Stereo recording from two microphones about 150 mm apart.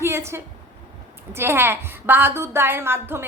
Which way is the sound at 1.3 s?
15° right (ahead or behind).